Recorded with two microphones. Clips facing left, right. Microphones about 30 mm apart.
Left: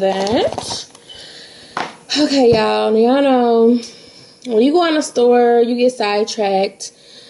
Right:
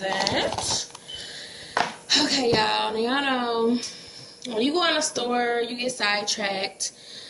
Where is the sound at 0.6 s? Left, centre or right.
Left.